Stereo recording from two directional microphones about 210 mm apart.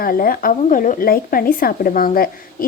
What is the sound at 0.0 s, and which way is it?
A woman's voice, 45° left (ahead or behind).